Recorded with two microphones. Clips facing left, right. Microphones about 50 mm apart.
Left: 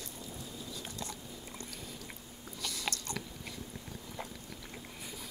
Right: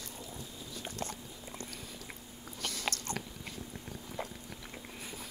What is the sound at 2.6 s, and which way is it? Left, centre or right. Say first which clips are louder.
Biting: right 1 dB; right.